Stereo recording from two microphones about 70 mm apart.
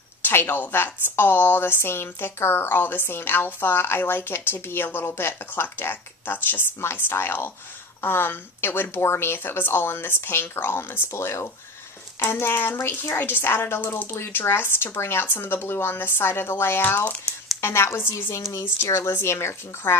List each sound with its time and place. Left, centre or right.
0.2 s speech: left